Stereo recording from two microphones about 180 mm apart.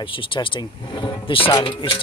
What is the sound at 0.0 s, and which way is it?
Speech, 30° left (ahead or behind).